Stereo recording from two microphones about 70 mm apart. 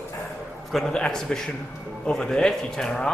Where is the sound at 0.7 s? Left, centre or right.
Centre.